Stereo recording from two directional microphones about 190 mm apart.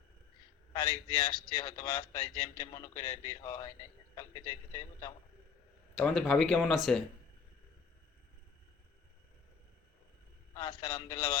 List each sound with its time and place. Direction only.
0.7 s a man's voice: 20° left (ahead or behind)
6.0 s speech: centre (ahead or behind)
10.5 s a man's voice: 20° left (ahead or behind)